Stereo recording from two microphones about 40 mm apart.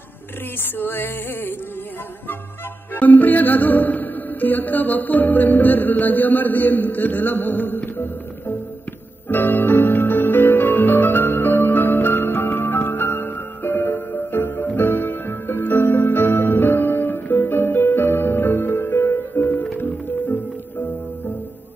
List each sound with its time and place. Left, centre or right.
0.6 s music: left
2.9 s music: left
9.3 s music: left
19.4 s music: left